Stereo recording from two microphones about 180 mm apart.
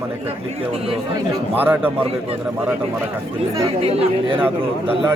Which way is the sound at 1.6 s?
10° right (ahead or behind).